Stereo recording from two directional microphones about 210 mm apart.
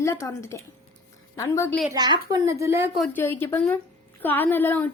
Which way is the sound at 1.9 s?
20° right (ahead or behind).